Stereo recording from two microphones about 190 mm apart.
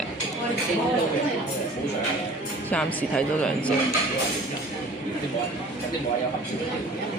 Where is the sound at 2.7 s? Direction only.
5° left (ahead or behind).